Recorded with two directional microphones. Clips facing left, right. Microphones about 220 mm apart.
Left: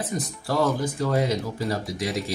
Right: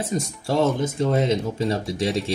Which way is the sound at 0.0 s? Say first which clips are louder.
Right 3 dB; 25° right (ahead or behind).